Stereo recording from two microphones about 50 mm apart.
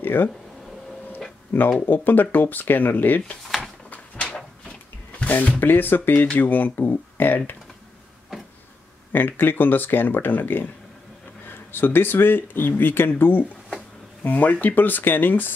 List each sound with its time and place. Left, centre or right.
0.0 s speech: left
1.5 s speech: left
3.4 s a sound: centre
3.9 s a sound: left
5.2 s speech: left
9.1 s speech: left